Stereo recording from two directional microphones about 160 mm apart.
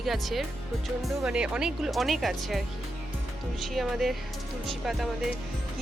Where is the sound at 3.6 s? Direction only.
Centre (ahead or behind).